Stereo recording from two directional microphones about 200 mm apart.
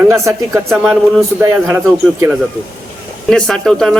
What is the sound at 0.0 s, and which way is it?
Speech, 10° right (ahead or behind).